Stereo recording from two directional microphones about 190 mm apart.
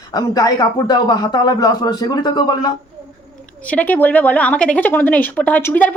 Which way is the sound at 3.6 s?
10° left (ahead or behind).